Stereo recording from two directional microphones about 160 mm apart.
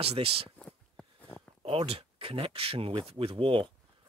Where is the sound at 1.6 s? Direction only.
40° right (ahead or behind).